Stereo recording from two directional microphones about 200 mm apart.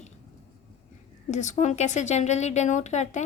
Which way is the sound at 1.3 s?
35° left (ahead or behind).